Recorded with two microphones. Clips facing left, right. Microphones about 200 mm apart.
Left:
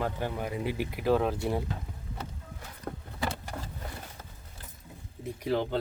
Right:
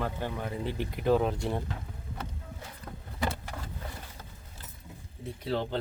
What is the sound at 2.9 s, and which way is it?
Vehicle, 45° left (ahead or behind).